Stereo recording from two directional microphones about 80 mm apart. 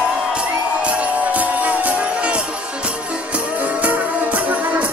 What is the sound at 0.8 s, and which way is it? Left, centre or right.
Music, centre.